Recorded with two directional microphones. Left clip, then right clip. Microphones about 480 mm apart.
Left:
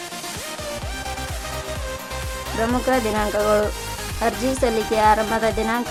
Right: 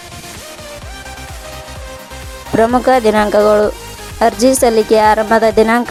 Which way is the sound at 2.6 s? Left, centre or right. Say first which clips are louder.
Right 10 dB; centre.